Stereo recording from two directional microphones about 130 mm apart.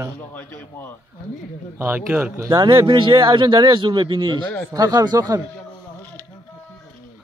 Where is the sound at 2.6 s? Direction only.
35° right (ahead or behind).